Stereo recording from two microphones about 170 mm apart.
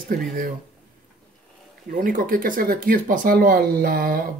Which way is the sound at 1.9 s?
55° right (ahead or behind).